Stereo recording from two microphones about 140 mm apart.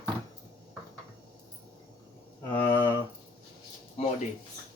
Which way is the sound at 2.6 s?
15° left (ahead or behind).